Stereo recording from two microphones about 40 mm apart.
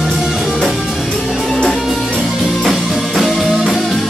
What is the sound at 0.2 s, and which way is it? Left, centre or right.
Music, centre.